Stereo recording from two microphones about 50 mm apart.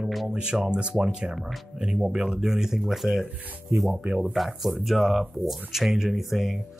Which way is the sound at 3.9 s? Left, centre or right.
Right.